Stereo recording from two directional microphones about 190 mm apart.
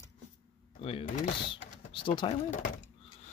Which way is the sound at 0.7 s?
30° left (ahead or behind).